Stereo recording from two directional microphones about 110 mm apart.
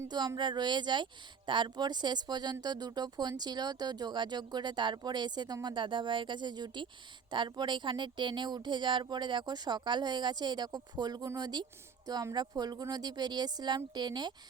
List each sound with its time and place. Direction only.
0.1 s speech: 40° right (ahead or behind)